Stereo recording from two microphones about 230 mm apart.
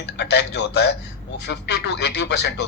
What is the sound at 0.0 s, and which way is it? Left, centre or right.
Speech, left.